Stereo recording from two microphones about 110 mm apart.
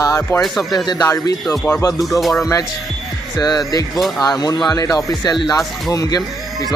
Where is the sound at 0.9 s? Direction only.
30° left (ahead or behind).